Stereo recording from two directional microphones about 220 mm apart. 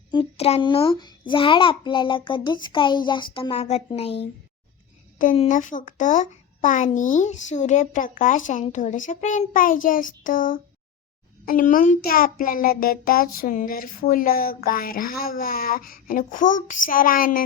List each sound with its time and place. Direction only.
0.1 s a child's voice: 25° left (ahead or behind)
5.2 s a child's voice: 35° left (ahead or behind)